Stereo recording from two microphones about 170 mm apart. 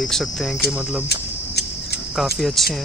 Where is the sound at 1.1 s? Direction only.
75° left (ahead or behind).